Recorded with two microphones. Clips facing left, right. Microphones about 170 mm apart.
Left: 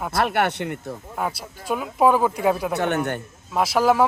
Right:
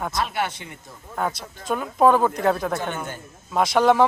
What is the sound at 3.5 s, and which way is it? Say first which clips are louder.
Speech: right 1 dB; 5° left (ahead or behind).